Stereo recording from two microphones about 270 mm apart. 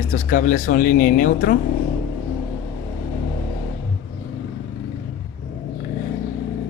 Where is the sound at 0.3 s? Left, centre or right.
Left.